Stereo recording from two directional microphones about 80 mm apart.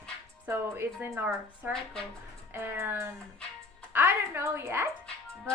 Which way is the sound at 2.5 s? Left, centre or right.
Right.